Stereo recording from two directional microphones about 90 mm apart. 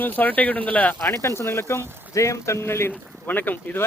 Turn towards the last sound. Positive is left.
turn(degrees=20)  # may be behind; listen again after turning